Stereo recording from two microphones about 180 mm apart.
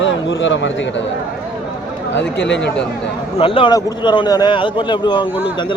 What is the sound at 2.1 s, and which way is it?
Speech, 75° left (ahead or behind).